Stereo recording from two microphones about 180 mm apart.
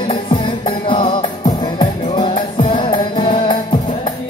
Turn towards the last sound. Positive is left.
turn(degrees=25)  # may be behind; listen again after turning